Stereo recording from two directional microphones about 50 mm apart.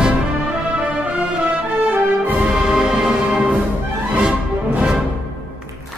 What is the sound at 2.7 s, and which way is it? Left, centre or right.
Music, centre.